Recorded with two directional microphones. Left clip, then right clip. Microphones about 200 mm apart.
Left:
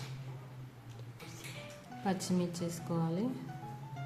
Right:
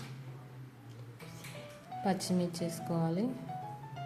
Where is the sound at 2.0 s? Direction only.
15° right (ahead or behind).